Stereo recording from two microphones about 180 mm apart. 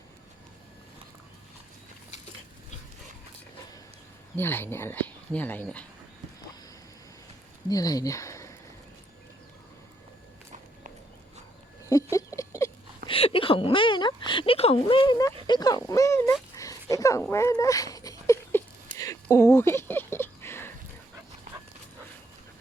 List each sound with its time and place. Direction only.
4.4 s speech: 10° left (ahead or behind)
7.7 s speech: 20° left (ahead or behind)
12.1 s rodents: 15° left (ahead or behind)
13.1 s a sound: 30° left (ahead or behind)
15.4 s speech: 25° left (ahead or behind)
16.6 s a sound: 20° left (ahead or behind)